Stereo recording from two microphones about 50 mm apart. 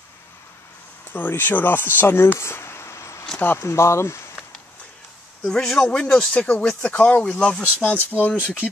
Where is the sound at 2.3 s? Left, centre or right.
Left.